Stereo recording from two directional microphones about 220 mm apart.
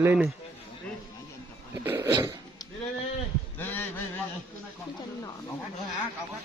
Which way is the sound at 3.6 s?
10° left (ahead or behind).